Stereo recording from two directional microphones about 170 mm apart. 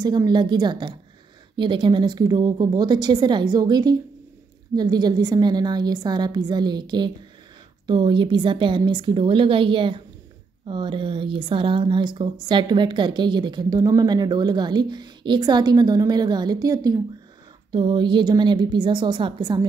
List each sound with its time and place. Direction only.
0.0 s a woman's voice: 25° right (ahead or behind)